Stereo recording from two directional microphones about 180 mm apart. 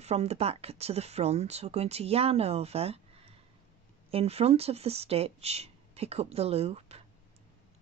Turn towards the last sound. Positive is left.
turn(degrees=-35)  # may be behind; listen again after turning